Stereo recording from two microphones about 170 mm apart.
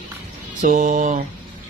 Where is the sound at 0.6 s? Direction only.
50° right (ahead or behind).